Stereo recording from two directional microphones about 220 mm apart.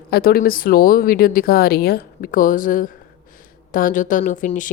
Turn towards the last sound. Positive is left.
turn(degrees=35)  # may be behind; listen again after turning